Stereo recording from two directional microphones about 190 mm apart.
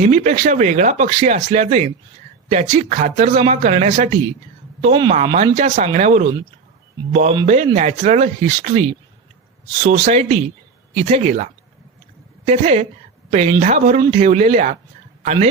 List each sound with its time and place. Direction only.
0.0 s speech: 40° right (ahead or behind)
4.8 s speech: 30° right (ahead or behind)
9.8 s speech: 35° right (ahead or behind)
12.5 s speech: 35° right (ahead or behind)